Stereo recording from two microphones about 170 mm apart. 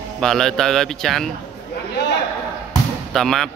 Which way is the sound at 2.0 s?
85° left.